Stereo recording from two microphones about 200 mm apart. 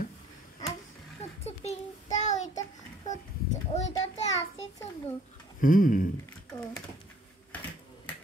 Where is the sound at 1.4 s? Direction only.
30° left (ahead or behind).